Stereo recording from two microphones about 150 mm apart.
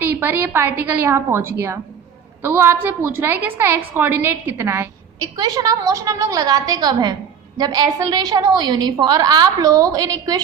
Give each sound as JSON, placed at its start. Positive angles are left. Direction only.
{"t": 0.0, "sound": "a woman's voice", "side_deg": -15}